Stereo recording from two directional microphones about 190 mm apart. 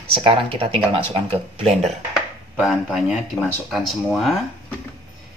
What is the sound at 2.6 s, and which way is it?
Speech, 5° right (ahead or behind).